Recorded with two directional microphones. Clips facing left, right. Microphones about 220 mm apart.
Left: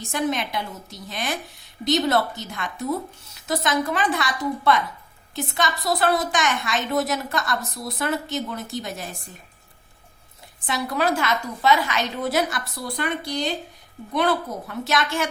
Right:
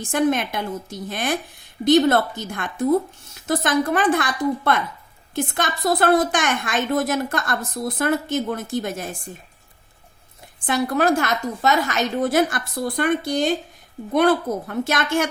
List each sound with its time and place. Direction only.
0.1 s a woman's voice: 50° right (ahead or behind)
10.7 s a woman's voice: 50° right (ahead or behind)